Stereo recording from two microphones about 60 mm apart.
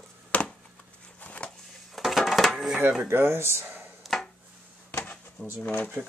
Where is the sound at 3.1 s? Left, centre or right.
Right.